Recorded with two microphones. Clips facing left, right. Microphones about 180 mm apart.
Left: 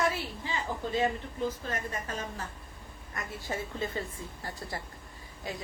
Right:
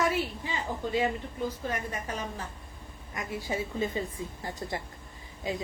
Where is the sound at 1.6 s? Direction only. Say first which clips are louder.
Right 2 dB; 15° right (ahead or behind).